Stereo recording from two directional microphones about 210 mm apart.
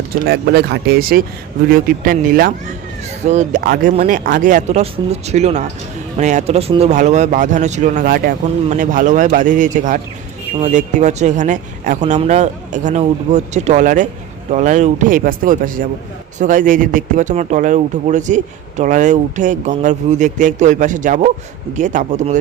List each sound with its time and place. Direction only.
0.3 s speech: 50° right (ahead or behind)